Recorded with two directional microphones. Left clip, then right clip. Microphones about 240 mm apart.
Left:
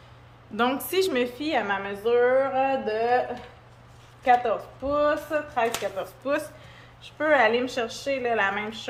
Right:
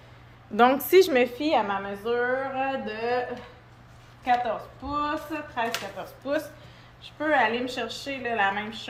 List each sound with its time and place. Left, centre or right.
0.5 s a woman's voice: centre; by 3.2 s left
4.2 s speech: centre